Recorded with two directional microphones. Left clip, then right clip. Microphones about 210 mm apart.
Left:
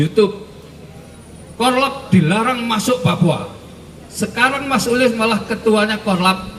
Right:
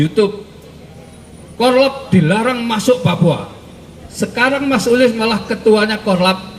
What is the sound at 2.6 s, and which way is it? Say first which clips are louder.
A man's voice: right 3 dB; 35° left (ahead or behind).